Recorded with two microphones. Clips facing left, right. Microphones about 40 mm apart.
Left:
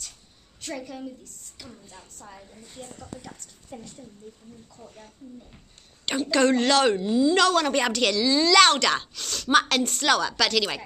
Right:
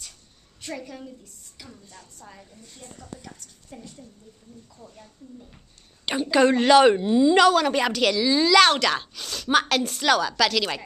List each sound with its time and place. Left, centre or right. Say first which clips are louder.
0.6 s a woman's voice: left 1 dB; centre
2.2 s speech: left 2 dB; centre
2.5 s a woman's voice: left 3 dB; centre
6.0 s a woman's voice: right 2 dB; centre
7.4 s speech: right 3 dB; centre